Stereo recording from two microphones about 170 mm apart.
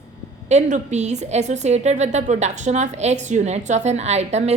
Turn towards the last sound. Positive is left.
turn(degrees=-40)  # may be behind; listen again after turning